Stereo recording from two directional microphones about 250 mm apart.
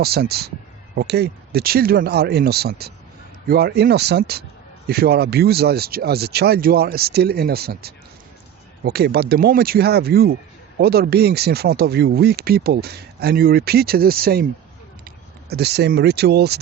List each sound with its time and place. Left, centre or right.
0.0 s speech: right